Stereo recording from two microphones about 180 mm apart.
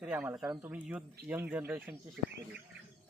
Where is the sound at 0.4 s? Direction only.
20° right (ahead or behind).